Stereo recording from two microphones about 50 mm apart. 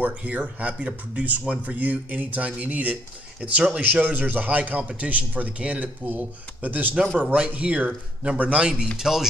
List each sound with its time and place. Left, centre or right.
0.2 s a man's voice: right
8.9 s speech: centre